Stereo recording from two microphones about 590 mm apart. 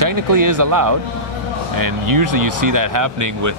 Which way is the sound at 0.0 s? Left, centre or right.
Right.